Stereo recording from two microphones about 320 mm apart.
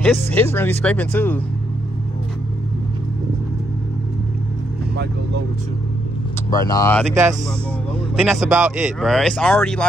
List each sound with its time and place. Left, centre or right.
0.0 s speech: centre
6.5 s speech: centre
8.2 s speech: centre